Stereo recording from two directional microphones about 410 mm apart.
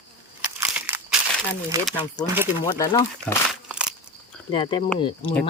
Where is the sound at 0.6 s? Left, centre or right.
Centre.